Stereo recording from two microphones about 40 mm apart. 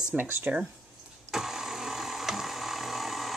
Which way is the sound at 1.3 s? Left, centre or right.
Centre.